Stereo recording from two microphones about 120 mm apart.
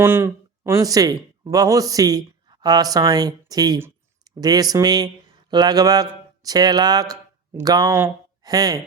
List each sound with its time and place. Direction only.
0.0 s speech: 20° right (ahead or behind)